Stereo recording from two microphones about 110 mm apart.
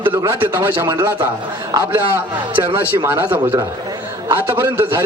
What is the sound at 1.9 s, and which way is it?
A man's voice, 20° right (ahead or behind).